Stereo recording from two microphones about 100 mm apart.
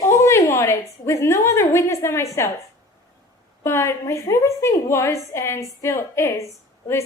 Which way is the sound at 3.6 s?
25° left (ahead or behind).